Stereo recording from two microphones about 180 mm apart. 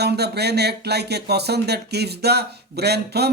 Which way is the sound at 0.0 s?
65° right (ahead or behind).